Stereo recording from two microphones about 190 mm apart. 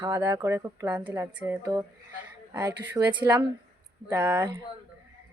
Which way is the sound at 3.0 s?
15° right (ahead or behind).